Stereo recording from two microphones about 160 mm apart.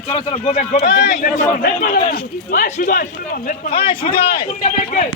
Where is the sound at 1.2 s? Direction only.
60° left (ahead or behind).